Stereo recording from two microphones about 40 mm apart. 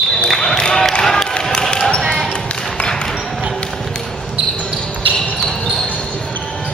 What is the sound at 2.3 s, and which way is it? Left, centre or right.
Basketball bounce, left.